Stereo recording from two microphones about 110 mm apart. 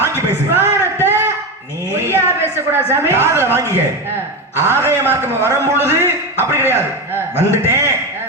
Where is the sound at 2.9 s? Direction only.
20° right (ahead or behind).